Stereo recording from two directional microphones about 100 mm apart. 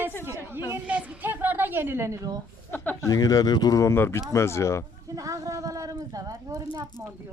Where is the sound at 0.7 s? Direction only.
15° right (ahead or behind); by 2.4 s 35° right (ahead or behind).